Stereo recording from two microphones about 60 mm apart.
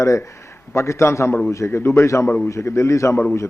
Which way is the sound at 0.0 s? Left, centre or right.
Left.